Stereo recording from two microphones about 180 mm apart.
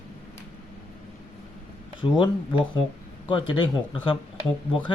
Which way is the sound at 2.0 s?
25° left (ahead or behind).